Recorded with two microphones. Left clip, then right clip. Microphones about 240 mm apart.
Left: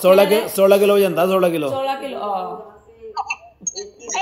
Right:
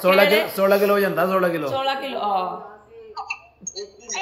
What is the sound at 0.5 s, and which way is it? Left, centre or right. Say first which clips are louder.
A man's voice: left 4 dB; left.